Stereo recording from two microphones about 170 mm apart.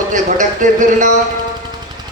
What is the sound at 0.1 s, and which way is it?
A man's voice, 50° right (ahead or behind).